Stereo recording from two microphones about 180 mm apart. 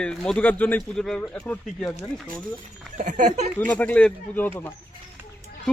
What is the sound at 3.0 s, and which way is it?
Speech, 45° right (ahead or behind).